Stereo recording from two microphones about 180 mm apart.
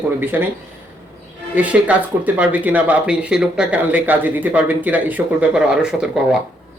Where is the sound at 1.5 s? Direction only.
10° right (ahead or behind).